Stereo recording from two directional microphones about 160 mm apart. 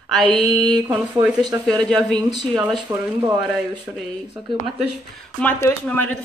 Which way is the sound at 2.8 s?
25° right (ahead or behind).